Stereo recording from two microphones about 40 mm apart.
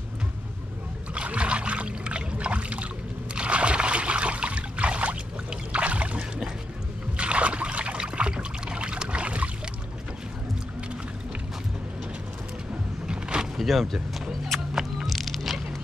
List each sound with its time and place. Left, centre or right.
1.1 s trickle: right
3.3 s a sound: right
5.7 s rowboat: right
7.2 s trickle: right
13.0 s a sound: right
13.6 s power windows: centre
14.7 s music: centre
15.0 s music: centre